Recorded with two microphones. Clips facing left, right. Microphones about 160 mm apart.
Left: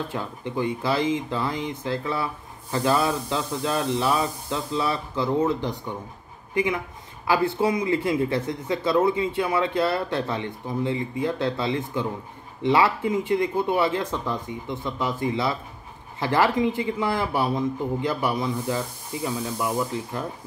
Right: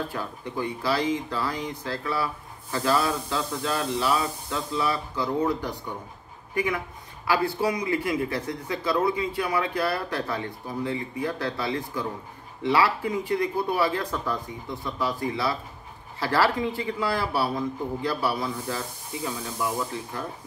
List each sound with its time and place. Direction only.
0.1 s a man's voice: 20° left (ahead or behind)